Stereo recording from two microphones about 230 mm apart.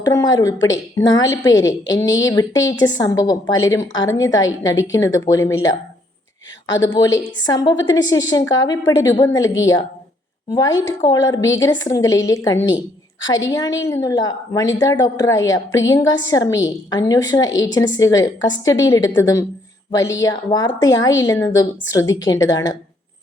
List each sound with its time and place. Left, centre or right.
0.0 s a woman's voice: centre
6.7 s a woman's voice: centre
10.5 s a woman's voice: centre